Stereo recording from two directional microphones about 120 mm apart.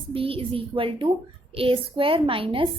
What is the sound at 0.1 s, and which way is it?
A woman's voice, 50° right (ahead or behind).